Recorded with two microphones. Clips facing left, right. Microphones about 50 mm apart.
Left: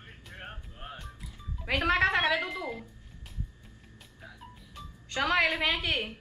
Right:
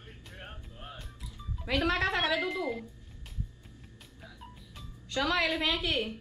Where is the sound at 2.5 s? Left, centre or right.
Centre.